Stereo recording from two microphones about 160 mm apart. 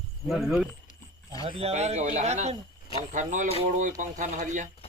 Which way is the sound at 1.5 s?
40° right (ahead or behind).